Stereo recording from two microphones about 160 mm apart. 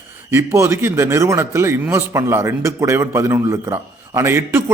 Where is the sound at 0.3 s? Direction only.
15° right (ahead or behind).